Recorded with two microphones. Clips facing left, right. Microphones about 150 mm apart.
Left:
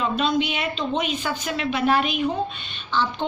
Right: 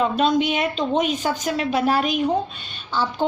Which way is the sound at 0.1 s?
45° right (ahead or behind).